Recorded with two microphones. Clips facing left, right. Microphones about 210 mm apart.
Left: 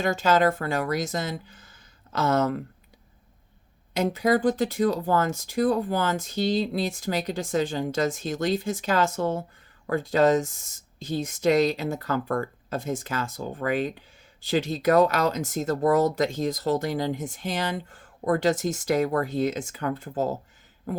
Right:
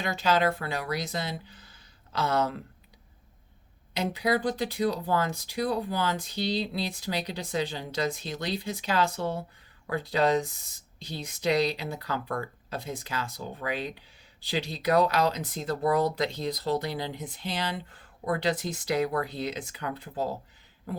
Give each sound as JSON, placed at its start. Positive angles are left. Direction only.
{"t": 0.0, "sound": "speech", "side_deg": 50}
{"t": 3.9, "sound": "speech", "side_deg": 45}